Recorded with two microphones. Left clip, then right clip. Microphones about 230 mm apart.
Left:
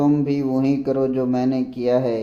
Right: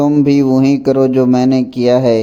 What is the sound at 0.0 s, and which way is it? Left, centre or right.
Speech, right.